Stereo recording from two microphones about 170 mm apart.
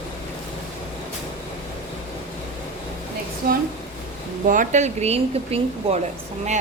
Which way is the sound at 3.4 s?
65° right (ahead or behind).